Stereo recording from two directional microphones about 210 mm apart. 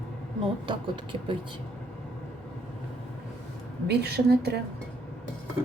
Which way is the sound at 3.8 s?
50° right (ahead or behind).